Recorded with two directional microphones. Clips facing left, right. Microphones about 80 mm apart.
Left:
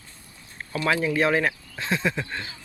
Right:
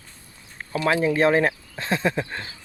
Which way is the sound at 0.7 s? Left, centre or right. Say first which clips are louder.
Right 3 dB; right.